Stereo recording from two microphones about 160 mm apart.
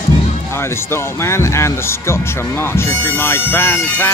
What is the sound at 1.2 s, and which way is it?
Speech, 15° left (ahead or behind).